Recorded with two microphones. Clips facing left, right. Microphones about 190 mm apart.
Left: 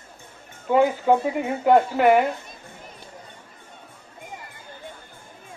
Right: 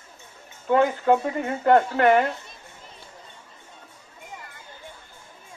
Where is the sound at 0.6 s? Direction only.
10° left (ahead or behind).